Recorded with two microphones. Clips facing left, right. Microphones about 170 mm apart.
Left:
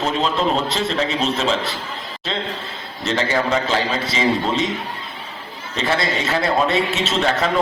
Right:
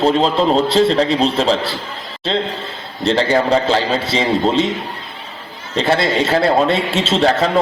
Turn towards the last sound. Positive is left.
turn(degrees=-35)  # may be behind; listen again after turning